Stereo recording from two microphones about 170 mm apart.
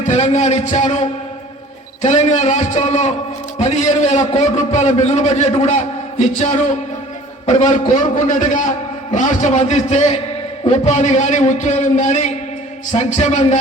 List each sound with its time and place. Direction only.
0.0 s a man's voice: 40° left (ahead or behind)